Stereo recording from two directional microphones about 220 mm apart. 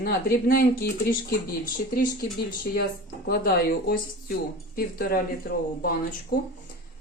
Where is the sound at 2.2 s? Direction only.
45° left (ahead or behind).